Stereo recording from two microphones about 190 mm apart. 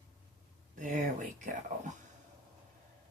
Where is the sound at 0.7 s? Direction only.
45° right (ahead or behind).